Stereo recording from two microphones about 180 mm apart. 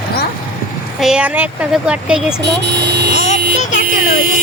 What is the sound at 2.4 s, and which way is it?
Speech, 70° right (ahead or behind).